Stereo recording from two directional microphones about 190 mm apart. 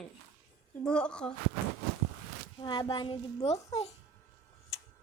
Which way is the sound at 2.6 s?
25° left (ahead or behind).